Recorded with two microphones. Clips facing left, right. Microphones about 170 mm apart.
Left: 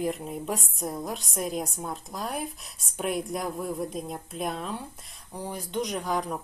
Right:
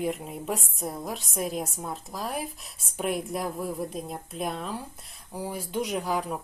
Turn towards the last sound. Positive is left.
turn(degrees=-5)  # may be behind; listen again after turning